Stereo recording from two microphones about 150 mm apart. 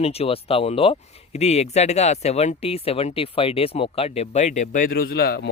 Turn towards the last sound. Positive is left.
turn(degrees=90)